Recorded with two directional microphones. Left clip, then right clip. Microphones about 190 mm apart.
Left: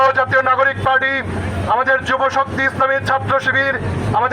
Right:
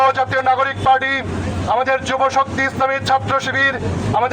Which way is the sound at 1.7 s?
45° right (ahead or behind).